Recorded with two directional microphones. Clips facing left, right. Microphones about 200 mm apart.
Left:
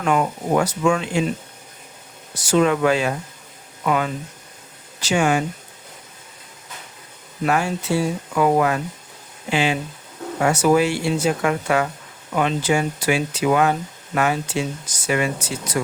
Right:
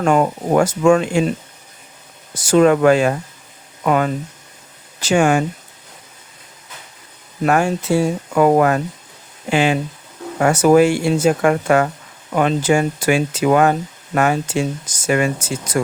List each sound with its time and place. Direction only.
0.0 s speech: 45° right (ahead or behind)
2.3 s speech: 50° right (ahead or behind)
7.4 s speech: 50° right (ahead or behind)